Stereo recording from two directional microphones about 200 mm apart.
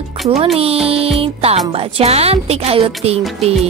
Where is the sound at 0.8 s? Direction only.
30° right (ahead or behind).